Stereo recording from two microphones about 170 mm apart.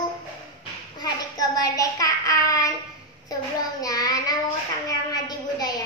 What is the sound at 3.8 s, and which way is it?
Child singing, 20° left (ahead or behind).